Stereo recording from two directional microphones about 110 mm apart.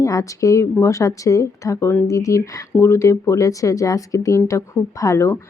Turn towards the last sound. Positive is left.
turn(degrees=30)  # may be behind; listen again after turning